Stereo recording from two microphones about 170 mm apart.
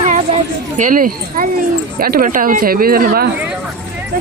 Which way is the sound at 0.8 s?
55° right (ahead or behind).